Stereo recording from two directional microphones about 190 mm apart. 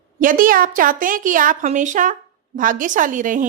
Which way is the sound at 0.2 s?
45° right (ahead or behind).